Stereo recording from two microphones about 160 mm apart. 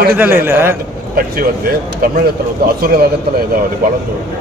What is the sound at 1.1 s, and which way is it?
Speech, 65° right (ahead or behind).